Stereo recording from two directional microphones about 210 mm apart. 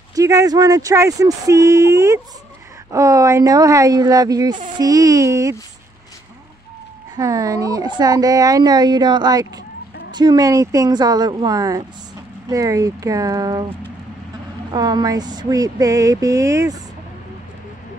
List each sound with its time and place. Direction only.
0.1 s speech: 15° right (ahead or behind)
7.2 s speech: 15° right (ahead or behind)